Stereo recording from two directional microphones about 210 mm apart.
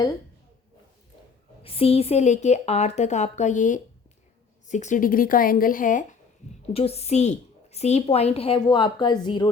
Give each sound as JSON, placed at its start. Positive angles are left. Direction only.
{"t": 1.6, "sound": "a woman's voice", "side_deg": 25}